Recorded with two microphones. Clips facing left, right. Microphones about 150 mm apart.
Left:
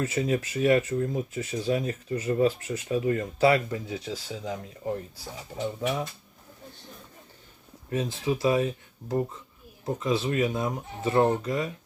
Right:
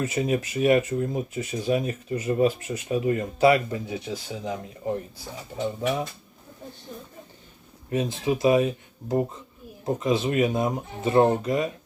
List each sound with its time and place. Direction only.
0.0 s speech: 15° right (ahead or behind)
7.9 s speech: 15° right (ahead or behind)